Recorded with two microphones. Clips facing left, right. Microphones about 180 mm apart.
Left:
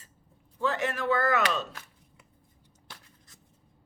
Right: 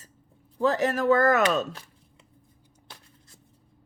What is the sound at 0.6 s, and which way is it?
Speech, 40° right (ahead or behind).